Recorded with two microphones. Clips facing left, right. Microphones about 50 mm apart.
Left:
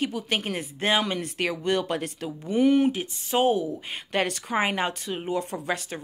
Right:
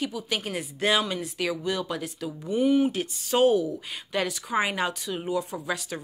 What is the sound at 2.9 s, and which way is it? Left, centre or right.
Speech, centre.